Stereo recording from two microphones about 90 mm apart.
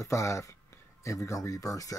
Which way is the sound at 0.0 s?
35° left (ahead or behind).